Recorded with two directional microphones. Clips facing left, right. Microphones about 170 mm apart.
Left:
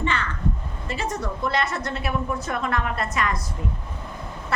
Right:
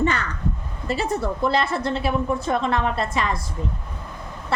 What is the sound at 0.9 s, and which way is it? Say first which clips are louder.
A woman's voice: right 5 dB; 35° right (ahead or behind).